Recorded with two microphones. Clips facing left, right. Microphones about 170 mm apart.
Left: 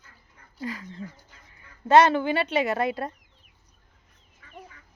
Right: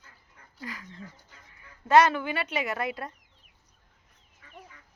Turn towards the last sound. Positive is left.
turn(degrees=30)  # may be behind; listen again after turning